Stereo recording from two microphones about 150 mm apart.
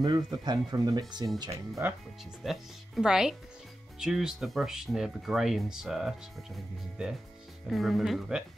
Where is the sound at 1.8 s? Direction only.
15° right (ahead or behind).